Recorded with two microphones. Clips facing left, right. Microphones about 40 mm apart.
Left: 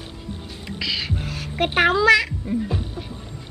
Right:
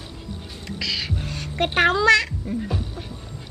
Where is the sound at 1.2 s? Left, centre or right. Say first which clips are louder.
Left 1 dB; centre.